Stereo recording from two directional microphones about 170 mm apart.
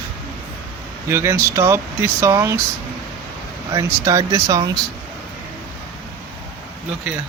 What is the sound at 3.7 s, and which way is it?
Speech, 20° right (ahead or behind).